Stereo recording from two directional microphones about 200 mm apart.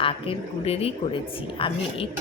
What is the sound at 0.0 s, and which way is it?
A woman's voice, 25° left (ahead or behind).